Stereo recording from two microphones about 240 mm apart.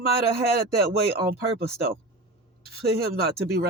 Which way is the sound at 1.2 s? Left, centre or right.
Right.